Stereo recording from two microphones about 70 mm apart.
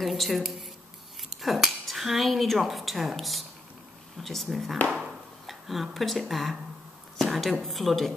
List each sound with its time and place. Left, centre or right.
0.0 s speech: centre